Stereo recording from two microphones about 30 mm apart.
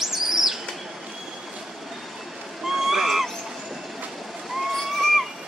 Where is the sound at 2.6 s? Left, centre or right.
Centre.